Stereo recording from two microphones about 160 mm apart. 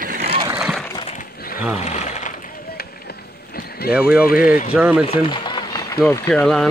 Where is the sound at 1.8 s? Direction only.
45° left (ahead or behind).